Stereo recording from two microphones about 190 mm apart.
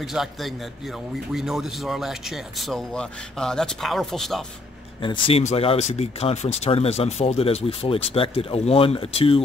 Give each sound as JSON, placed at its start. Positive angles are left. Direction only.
{"t": 0.0, "sound": "a man's voice", "side_deg": 0}
{"t": 5.0, "sound": "speech", "side_deg": 25}